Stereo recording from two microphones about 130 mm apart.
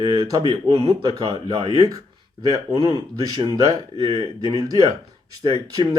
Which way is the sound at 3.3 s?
30° right (ahead or behind).